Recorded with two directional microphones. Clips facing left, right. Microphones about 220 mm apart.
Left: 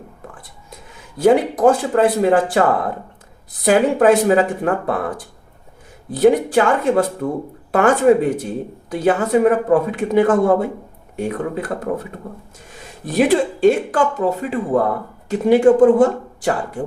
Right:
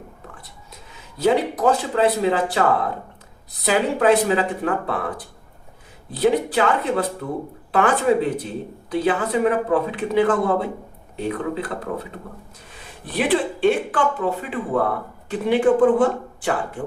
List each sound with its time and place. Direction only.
1.2 s speech: 50° left (ahead or behind)
13.1 s speech: 45° left (ahead or behind)